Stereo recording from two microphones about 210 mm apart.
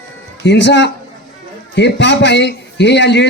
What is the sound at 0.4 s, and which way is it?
A man's voice, 55° left (ahead or behind).